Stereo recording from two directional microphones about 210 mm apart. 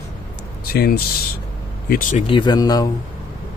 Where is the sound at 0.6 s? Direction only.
45° left (ahead or behind).